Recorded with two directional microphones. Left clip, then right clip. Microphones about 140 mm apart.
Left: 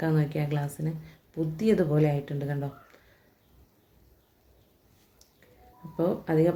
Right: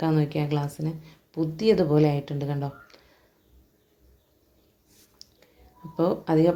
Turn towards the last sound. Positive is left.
turn(degrees=-15)  # may be behind; listen again after turning